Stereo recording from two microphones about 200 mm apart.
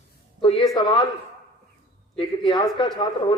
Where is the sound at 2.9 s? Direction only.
25° left (ahead or behind).